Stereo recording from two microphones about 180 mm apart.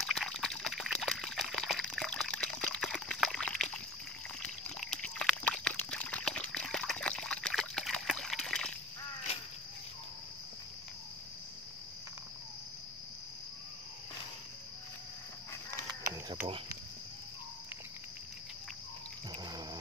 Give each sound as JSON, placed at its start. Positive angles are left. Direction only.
{"t": 0.0, "sound": "water", "side_deg": 0}
{"t": 4.4, "sound": "a sound", "side_deg": 5}
{"t": 19.3, "sound": "water", "side_deg": -25}